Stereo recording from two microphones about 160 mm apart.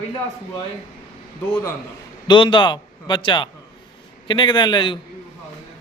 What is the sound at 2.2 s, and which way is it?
A man's voice, 30° left (ahead or behind).